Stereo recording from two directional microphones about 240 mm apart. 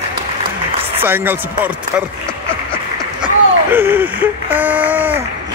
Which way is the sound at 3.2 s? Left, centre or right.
Centre.